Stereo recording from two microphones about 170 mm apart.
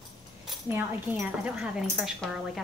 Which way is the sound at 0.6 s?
10° right (ahead or behind).